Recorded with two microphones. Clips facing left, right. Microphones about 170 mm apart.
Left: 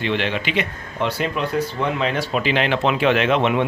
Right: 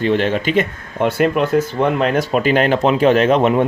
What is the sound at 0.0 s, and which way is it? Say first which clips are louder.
Speech: right 6 dB; 45° right (ahead or behind).